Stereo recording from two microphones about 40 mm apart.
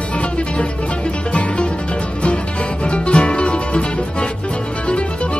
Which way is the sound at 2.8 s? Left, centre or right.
Left.